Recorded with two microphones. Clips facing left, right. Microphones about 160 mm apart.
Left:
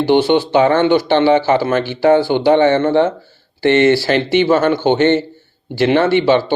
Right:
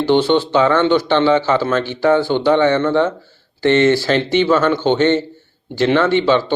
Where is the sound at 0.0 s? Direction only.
10° left (ahead or behind).